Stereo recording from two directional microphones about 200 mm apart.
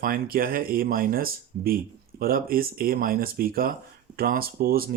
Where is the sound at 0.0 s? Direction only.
45° right (ahead or behind).